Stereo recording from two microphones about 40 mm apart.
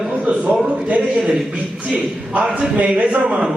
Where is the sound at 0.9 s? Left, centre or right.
Right.